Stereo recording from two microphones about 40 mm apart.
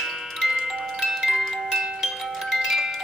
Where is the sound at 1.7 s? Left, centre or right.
Centre.